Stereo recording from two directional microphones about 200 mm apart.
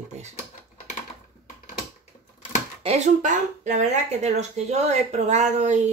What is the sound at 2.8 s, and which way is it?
Speech, 35° right (ahead or behind).